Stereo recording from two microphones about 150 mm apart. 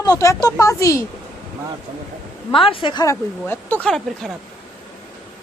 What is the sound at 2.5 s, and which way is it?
Speech, 35° left (ahead or behind).